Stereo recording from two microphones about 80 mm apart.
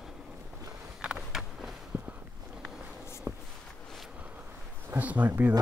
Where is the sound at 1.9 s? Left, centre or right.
Right.